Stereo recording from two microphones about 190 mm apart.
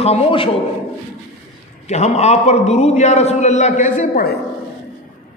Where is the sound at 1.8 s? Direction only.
35° left (ahead or behind).